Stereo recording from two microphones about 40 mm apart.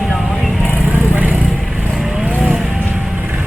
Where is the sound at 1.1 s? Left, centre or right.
Right.